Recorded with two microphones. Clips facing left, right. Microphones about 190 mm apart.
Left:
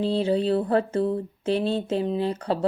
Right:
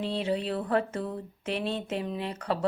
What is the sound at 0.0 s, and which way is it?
Speech, 30° left (ahead or behind).